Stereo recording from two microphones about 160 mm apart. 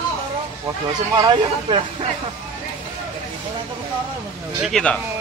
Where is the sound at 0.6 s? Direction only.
25° right (ahead or behind).